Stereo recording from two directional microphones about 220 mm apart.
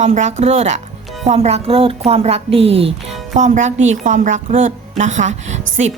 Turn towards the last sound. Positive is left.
turn(degrees=-35)  # may be behind; listen again after turning